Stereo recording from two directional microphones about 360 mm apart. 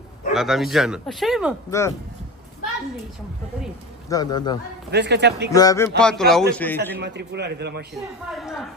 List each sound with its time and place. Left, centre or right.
0.3 s speech: centre
4.1 s a man's voice: centre
4.9 s a man's voice: right
5.5 s speech: centre
7.0 s a man's voice: right
7.9 s speech: centre